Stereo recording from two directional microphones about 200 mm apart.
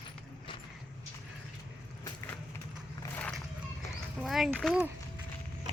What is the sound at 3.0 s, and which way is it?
Horse, 5° left (ahead or behind).